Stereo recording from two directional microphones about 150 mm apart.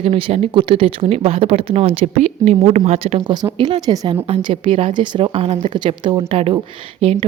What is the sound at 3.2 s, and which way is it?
A woman's voice, 30° right (ahead or behind).